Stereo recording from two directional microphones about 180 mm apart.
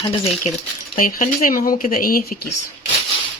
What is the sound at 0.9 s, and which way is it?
Speech, 50° left (ahead or behind).